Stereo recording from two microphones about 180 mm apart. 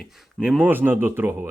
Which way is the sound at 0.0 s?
5° right (ahead or behind).